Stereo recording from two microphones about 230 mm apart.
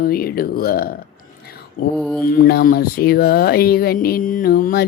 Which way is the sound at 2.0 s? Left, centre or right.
Centre.